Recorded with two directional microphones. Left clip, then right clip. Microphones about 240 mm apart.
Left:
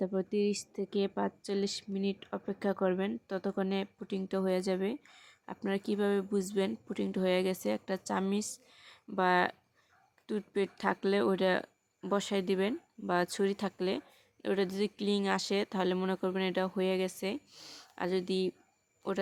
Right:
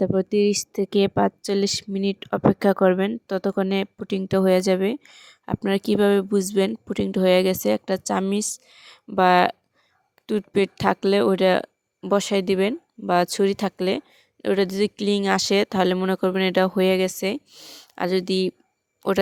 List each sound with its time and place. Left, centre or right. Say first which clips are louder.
0.0 s a woman's voice: right 12 dB; right